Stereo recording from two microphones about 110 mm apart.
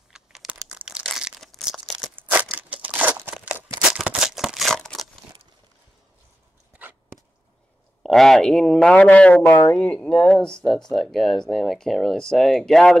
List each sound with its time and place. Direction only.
0.1 s crumpling: 5° right (ahead or behind)
2.5 s crumpling: 15° right (ahead or behind)
3.9 s a sound: 10° right (ahead or behind)
8.0 s speech: centre (ahead or behind)
9.4 s speech: 20° left (ahead or behind)
9.8 s speech: 10° left (ahead or behind)